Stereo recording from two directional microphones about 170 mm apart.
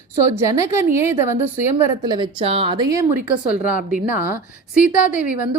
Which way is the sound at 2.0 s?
30° right (ahead or behind).